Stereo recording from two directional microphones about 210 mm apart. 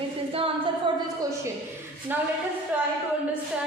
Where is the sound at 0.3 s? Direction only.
25° right (ahead or behind).